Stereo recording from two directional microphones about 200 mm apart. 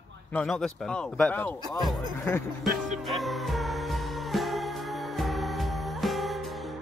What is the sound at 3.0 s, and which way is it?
Music, centre (ahead or behind).